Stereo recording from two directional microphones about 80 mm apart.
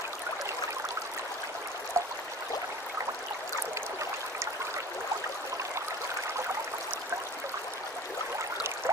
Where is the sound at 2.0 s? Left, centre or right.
Right.